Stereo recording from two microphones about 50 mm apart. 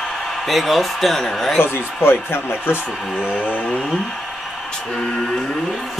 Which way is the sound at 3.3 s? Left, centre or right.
Left.